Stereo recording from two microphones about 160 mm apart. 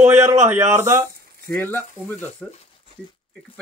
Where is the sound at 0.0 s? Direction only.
15° right (ahead or behind).